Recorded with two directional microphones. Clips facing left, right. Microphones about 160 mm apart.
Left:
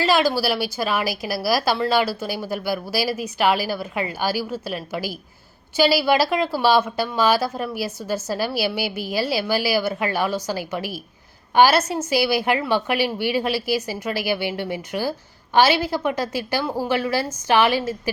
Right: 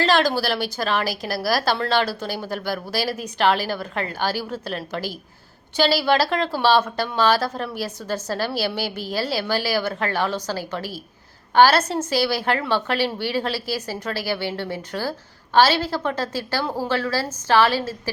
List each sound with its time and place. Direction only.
0.0 s speech: 10° left (ahead or behind)